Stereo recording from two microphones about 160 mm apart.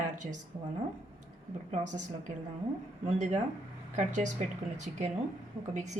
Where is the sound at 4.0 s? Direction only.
50° right (ahead or behind).